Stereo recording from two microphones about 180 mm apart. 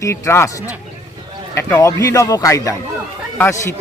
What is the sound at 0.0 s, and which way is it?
Speech, 15° left (ahead or behind).